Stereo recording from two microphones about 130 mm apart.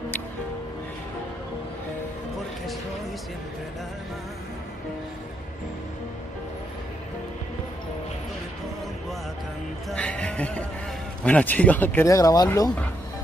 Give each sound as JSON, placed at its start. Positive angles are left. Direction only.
{"t": 9.8, "sound": "music", "side_deg": 10}
{"t": 11.2, "sound": "speech", "side_deg": 10}
{"t": 12.1, "sound": "speech", "side_deg": 25}